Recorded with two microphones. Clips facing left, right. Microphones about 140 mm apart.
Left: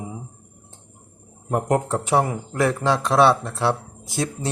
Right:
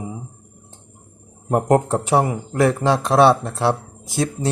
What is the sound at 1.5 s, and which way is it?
Speech, 35° right (ahead or behind).